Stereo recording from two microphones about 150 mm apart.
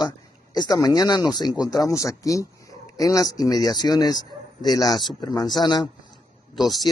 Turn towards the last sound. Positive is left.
turn(degrees=0)  # may be behind; listen again after turning